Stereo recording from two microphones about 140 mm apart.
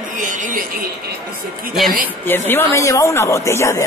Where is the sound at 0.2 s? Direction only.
65° right (ahead or behind).